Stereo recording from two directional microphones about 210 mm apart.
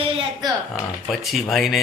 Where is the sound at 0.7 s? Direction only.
Centre (ahead or behind).